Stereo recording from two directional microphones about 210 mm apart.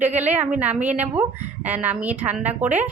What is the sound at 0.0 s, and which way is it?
Speech, 35° right (ahead or behind).